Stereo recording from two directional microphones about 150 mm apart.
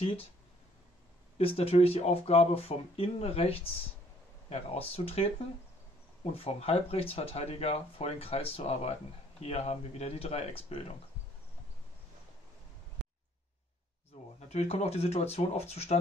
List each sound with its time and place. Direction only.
0.0 s speech: 40° left (ahead or behind)
1.4 s speech: 40° left (ahead or behind)
6.3 s speech: 40° left (ahead or behind)
14.5 s speech: 45° left (ahead or behind)